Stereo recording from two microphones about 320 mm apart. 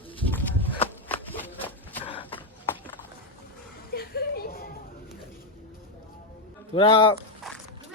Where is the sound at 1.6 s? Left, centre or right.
Centre.